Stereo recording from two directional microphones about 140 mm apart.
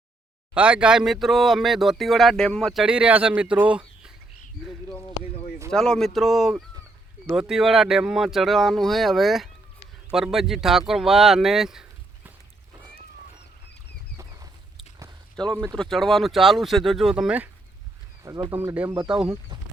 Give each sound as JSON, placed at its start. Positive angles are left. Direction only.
{"t": 0.5, "sound": "speech", "side_deg": -10}
{"t": 5.2, "sound": "a sound", "side_deg": 45}
{"t": 5.7, "sound": "speech", "side_deg": 5}
{"t": 15.6, "sound": "speech", "side_deg": 5}
{"t": 18.5, "sound": "speech", "side_deg": -15}
{"t": 19.0, "sound": "speech", "side_deg": -5}